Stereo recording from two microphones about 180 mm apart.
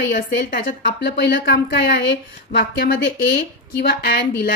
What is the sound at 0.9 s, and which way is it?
A woman's voice, 65° left (ahead or behind).